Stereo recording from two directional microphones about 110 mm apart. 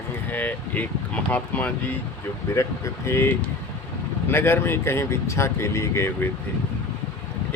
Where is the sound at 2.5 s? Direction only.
25° left (ahead or behind).